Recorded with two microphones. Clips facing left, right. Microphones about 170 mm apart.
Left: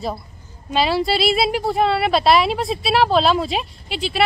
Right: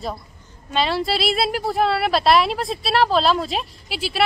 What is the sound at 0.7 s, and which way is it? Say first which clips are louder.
A woman's voice: left 3 dB; 5° left (ahead or behind).